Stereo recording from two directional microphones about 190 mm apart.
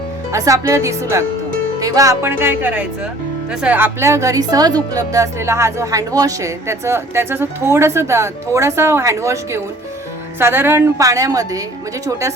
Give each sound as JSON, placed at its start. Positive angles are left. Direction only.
{"t": 0.3, "sound": "speech", "side_deg": -15}